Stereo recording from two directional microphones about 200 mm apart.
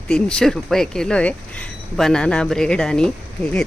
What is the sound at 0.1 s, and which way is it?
Speech, 5° left (ahead or behind).